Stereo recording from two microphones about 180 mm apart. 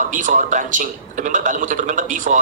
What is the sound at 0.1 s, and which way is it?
A man's voice, 45° right (ahead or behind).